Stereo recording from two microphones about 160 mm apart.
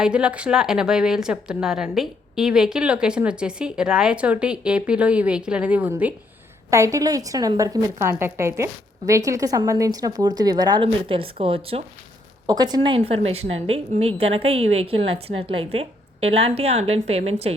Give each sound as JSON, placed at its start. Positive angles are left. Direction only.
{"t": 0.0, "sound": "a woman's voice", "side_deg": -5}
{"t": 12.5, "sound": "a woman's voice", "side_deg": -25}